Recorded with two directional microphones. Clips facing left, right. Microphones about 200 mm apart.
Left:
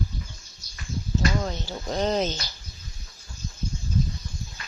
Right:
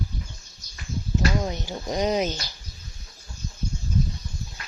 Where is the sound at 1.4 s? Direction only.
15° right (ahead or behind).